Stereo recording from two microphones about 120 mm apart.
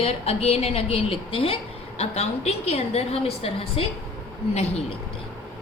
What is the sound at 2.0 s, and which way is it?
A woman's voice, 65° left (ahead or behind).